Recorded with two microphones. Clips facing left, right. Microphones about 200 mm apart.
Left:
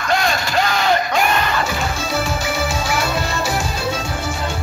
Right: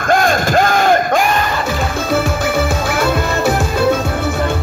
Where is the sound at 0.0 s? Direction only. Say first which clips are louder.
Right 6 dB; 50° right (ahead or behind).